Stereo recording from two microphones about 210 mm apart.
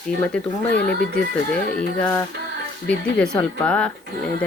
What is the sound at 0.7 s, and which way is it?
Speech, 50° left (ahead or behind).